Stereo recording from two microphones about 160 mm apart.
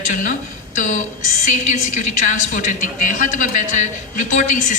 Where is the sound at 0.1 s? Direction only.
50° left (ahead or behind).